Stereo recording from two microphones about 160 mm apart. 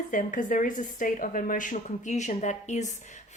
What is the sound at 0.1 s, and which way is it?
A woman's voice, 55° left (ahead or behind).